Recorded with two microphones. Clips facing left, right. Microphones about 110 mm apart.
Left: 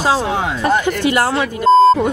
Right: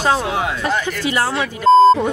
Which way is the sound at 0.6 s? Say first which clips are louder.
Left 5 dB; 45° left (ahead or behind).